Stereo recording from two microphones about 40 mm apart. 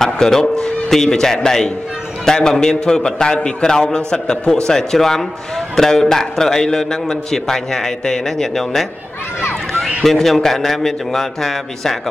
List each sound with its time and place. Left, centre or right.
0.0 s a man's voice: centre
10.0 s a man's voice: centre